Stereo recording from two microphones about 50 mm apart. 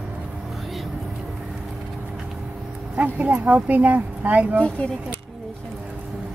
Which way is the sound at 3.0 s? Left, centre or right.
Right.